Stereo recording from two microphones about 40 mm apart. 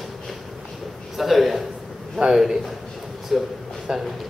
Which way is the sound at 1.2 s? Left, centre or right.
Centre.